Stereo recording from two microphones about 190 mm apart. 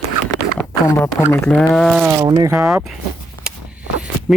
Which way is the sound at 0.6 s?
10° left (ahead or behind).